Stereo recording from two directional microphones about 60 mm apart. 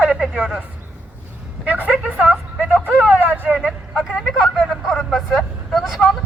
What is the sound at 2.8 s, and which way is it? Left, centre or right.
Vehicle, right.